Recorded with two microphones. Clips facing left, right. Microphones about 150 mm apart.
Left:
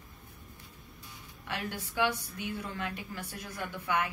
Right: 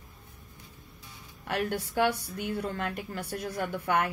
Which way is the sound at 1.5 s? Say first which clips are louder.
Right 7 dB; 50° right (ahead or behind).